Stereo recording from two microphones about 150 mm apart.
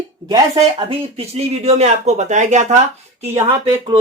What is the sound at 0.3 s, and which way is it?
Speech, 25° right (ahead or behind).